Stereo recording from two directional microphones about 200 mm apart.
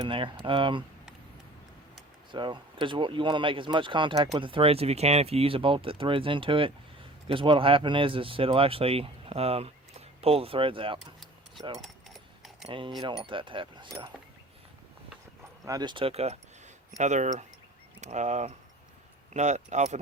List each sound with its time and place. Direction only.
0.0 s speech: 25° right (ahead or behind)
2.3 s speech: 25° right (ahead or behind)
12.6 s speech: 25° right (ahead or behind)
15.6 s speech: 20° right (ahead or behind); by 20.0 s 35° right (ahead or behind)